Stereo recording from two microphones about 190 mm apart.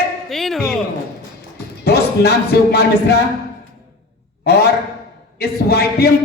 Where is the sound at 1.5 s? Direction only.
60° left (ahead or behind).